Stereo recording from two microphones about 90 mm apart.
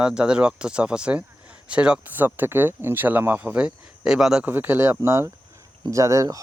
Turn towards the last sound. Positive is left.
turn(degrees=-40)  # may be behind; listen again after turning